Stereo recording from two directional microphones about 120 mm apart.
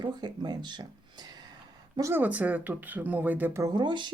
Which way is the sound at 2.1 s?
15° right (ahead or behind).